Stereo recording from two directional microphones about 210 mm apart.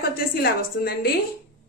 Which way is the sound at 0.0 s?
45° left (ahead or behind).